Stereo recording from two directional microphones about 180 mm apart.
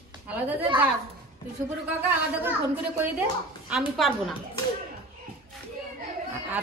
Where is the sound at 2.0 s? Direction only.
10° right (ahead or behind).